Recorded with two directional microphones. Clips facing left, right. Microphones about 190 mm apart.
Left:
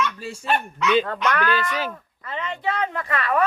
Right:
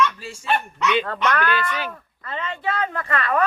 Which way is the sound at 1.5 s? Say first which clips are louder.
Left 1 dB; 35° left (ahead or behind).